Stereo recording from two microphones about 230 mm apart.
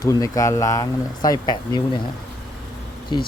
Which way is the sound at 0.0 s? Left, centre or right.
Centre.